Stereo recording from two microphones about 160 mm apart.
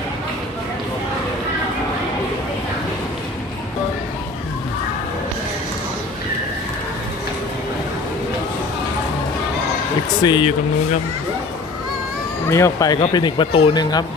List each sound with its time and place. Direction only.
10.2 s speech: 30° left (ahead or behind)
12.4 s speech: 20° left (ahead or behind)